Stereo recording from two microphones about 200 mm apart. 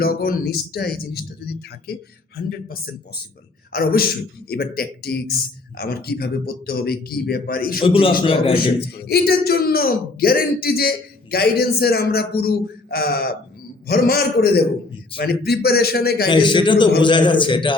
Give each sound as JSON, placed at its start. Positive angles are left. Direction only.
{"t": 0.0, "sound": "speech", "side_deg": 50}
{"t": 7.9, "sound": "a man's voice", "side_deg": 25}
{"t": 8.8, "sound": "speech", "side_deg": 55}
{"t": 16.3, "sound": "a man's voice", "side_deg": 25}